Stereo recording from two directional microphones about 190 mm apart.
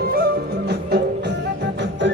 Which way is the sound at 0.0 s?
55° right (ahead or behind).